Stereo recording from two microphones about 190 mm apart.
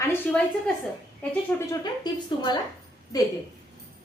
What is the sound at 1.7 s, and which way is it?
Speech, 20° left (ahead or behind).